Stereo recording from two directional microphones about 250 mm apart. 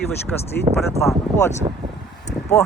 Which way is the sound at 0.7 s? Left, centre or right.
Right.